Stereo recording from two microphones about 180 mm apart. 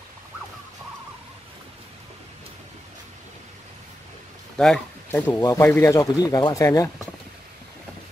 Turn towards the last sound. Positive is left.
turn(degrees=15)  # may be behind; listen again after turning